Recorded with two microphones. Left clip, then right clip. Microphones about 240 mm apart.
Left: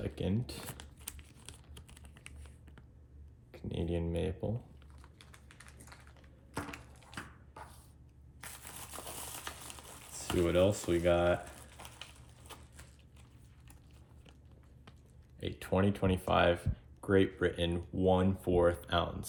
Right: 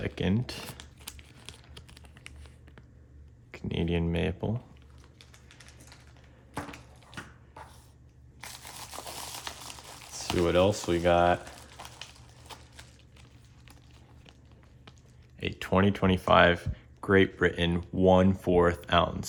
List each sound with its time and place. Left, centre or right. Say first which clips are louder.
0.4 s crumpling: right 6 dB; centre
3.5 s speech: right 6 dB; right
6.5 s a sound: right 3 dB; centre
8.4 s crumpling: right 6 dB; centre
10.4 s speech: right 5 dB; right
11.5 s horse: right 6 dB; centre
15.4 s speech: right 6 dB; right